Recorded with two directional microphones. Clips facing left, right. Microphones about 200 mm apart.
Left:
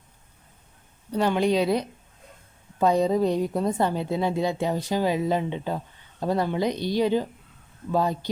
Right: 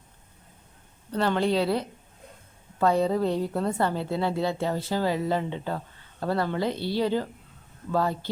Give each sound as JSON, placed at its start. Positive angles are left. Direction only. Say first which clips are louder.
{"t": 1.1, "sound": "a woman's voice", "louder": "left 2 dB", "side_deg": 15}